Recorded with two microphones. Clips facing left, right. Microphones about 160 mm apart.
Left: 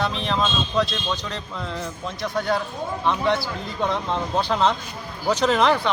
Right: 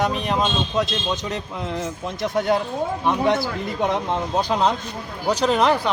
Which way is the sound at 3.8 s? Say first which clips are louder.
Right 2 dB; 15° right (ahead or behind).